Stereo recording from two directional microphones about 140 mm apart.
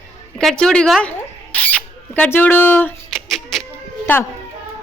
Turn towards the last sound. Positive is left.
turn(degrees=10)  # may be behind; listen again after turning